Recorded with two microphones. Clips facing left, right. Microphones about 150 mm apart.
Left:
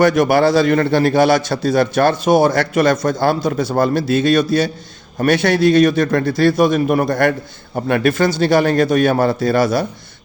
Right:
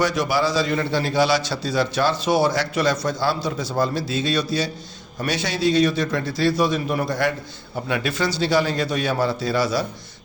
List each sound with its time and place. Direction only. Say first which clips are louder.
0.0 s a man's voice: left 8 dB; 55° left (ahead or behind)